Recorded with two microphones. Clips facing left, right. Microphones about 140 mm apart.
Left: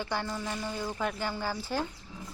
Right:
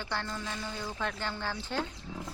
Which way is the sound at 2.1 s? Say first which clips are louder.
Right 4 dB; 80° right.